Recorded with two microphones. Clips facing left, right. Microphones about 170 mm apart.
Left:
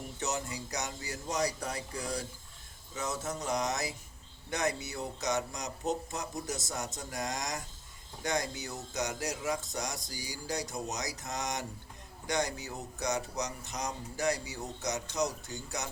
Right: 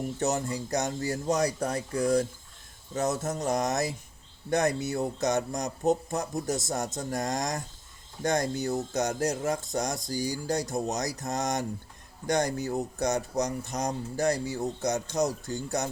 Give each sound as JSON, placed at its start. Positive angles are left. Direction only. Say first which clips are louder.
{"t": 0.2, "sound": "speech", "louder": "right 6 dB", "side_deg": -45}